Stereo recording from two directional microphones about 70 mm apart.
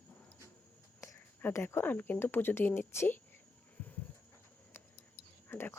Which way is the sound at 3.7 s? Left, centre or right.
Left.